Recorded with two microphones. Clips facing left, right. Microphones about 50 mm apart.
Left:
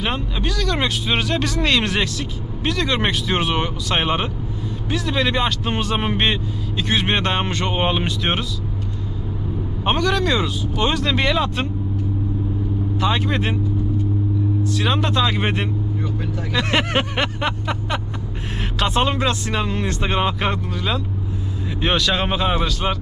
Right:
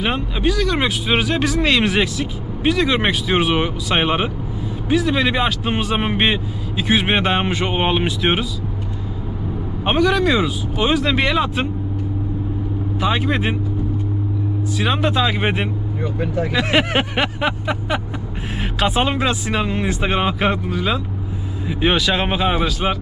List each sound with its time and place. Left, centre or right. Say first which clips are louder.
0.0 s speech: right 4 dB; centre
9.8 s speech: right 3 dB; centre
13.0 s speech: right 2 dB; centre
14.6 s speech: right 4 dB; centre
16.0 s speech: right 4 dB; right
16.6 s speech: right 1 dB; centre